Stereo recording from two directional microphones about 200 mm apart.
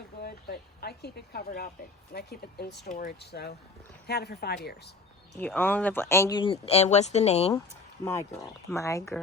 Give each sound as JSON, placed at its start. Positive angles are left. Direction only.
{"t": 0.2, "sound": "speech", "side_deg": 50}
{"t": 5.4, "sound": "speech", "side_deg": 10}
{"t": 8.0, "sound": "speech", "side_deg": 15}